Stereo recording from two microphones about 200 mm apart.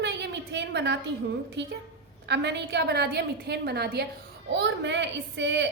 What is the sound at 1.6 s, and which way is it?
A woman's voice, 60° right (ahead or behind).